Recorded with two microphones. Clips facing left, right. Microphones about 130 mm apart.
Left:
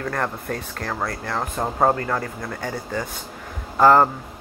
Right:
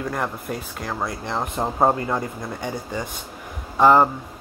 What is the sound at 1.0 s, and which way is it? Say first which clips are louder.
Speech: right 1 dB; 20° right (ahead or behind).